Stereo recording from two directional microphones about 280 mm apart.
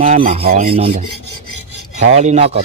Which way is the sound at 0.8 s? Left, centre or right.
Right.